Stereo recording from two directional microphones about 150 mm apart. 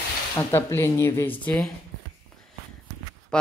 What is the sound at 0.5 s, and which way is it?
Speech, 15° left (ahead or behind).